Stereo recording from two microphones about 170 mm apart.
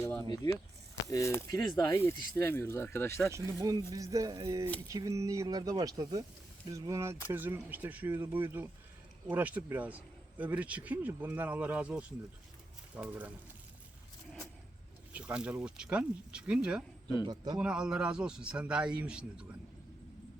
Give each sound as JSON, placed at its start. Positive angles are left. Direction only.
{"t": 1.1, "sound": "speech", "side_deg": 15}
{"t": 3.3, "sound": "speech", "side_deg": -20}
{"t": 15.1, "sound": "a man's voice", "side_deg": -5}
{"t": 17.2, "sound": "speech", "side_deg": -25}
{"t": 17.6, "sound": "a man's voice", "side_deg": -5}